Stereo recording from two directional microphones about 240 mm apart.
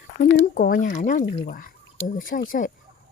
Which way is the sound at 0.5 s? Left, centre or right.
Left.